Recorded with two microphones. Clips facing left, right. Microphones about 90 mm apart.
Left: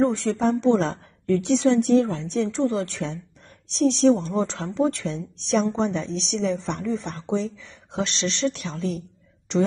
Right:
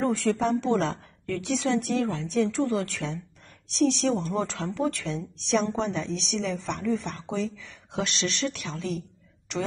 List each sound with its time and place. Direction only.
0.0 s a woman's voice: 25° left (ahead or behind)